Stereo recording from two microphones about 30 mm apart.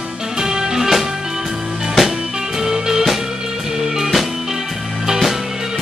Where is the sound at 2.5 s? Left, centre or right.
Centre.